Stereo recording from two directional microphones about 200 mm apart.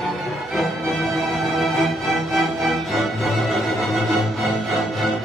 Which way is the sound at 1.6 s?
Centre (ahead or behind).